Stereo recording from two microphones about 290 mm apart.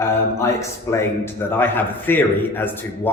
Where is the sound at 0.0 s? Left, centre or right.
Centre.